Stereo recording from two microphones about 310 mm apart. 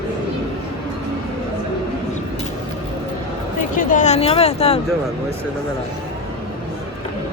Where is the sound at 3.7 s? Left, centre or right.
Left.